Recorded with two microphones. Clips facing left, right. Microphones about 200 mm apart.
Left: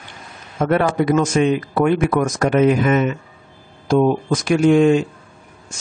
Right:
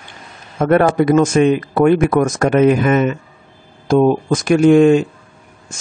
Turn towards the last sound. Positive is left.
turn(degrees=-50)  # may be behind; listen again after turning